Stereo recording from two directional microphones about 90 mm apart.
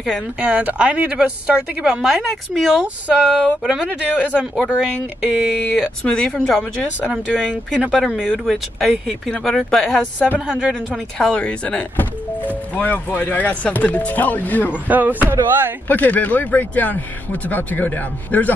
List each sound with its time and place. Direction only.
0.0 s a woman's voice: 10° right (ahead or behind)
2.8 s a woman's voice: 15° right (ahead or behind)
6.0 s speech: 10° left (ahead or behind)
7.8 s a woman's voice: 5° right (ahead or behind)
10.4 s a woman's voice: 10° right (ahead or behind)
10.9 s speech: 10° left (ahead or behind)
14.7 s speech: 20° right (ahead or behind)
15.9 s speech: 20° left (ahead or behind)